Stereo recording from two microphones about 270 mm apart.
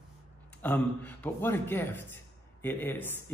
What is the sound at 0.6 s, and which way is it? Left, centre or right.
A man's voice, centre.